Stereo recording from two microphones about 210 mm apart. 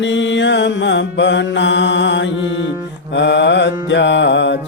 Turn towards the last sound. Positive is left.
turn(degrees=55)  # may be behind; listen again after turning